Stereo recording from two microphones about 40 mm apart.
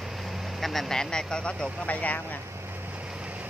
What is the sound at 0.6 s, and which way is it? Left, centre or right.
Vehicle, centre.